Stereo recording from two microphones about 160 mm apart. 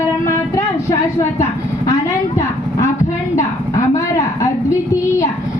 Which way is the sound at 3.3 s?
20° left (ahead or behind).